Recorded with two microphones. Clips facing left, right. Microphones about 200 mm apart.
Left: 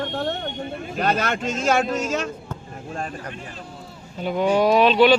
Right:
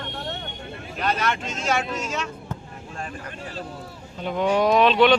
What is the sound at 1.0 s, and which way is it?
Speech, 45° left (ahead or behind).